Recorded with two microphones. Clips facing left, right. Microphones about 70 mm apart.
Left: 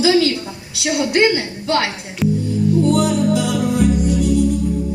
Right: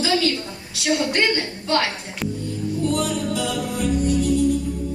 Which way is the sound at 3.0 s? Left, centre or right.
Centre.